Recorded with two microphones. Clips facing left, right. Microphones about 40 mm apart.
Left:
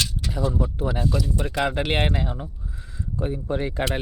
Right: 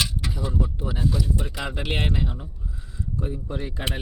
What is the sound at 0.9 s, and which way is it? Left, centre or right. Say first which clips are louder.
Speech: left 1 dB; centre.